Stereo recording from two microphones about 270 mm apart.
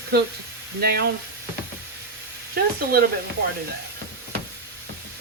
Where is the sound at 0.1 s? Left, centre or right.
Right.